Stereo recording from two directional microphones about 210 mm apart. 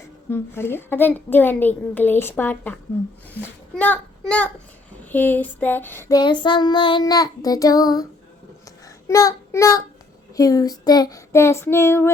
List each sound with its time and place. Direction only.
0.3 s child singing: 10° left (ahead or behind)
3.3 s a child's voice: 10° left (ahead or behind)
5.0 s child singing: 10° left (ahead or behind)
9.0 s child singing: 15° left (ahead or behind)